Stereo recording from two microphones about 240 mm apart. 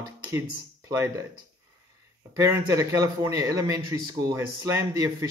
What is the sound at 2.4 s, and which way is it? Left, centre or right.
A man's voice, centre.